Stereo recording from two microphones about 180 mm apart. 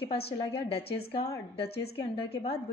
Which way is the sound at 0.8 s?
60° left (ahead or behind).